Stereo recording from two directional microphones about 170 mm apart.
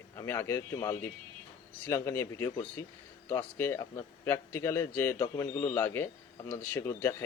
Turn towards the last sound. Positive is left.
turn(degrees=15)  # may be behind; listen again after turning